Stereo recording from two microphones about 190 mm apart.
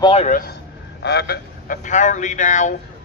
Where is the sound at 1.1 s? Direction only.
60° left (ahead or behind).